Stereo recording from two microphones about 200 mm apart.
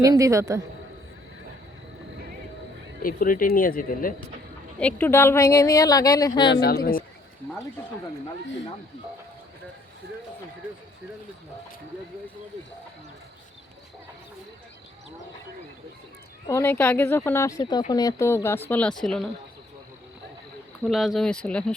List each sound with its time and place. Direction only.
0.0 s a man's voice: 15° right (ahead or behind)
3.0 s speech: 45° left (ahead or behind)
4.8 s speech: 10° left (ahead or behind)
6.5 s speech: 50° left (ahead or behind)
16.5 s speech: 10° left (ahead or behind)
20.8 s speech: centre (ahead or behind)